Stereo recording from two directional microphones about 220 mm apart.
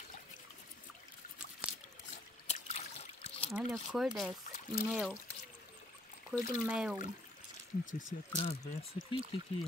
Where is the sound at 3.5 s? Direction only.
Centre (ahead or behind).